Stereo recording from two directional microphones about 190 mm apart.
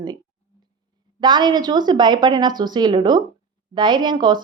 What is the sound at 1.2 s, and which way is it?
Speech, 20° right (ahead or behind).